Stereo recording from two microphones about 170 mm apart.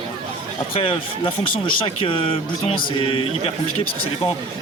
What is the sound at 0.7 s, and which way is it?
Speech, 30° left (ahead or behind).